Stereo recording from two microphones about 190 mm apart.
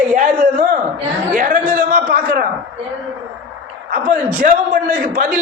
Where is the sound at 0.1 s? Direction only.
45° right (ahead or behind).